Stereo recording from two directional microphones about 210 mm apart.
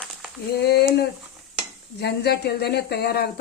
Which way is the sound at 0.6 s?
50° left (ahead or behind).